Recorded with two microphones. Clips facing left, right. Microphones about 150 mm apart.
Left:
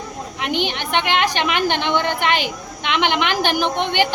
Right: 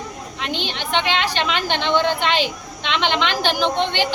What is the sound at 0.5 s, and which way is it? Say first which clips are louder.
A woman's voice: left 2 dB; 15° left (ahead or behind).